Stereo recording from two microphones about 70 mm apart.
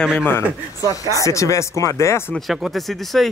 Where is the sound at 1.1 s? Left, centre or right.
Left.